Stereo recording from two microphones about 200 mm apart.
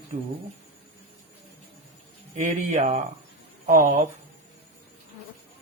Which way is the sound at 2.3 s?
40° right (ahead or behind).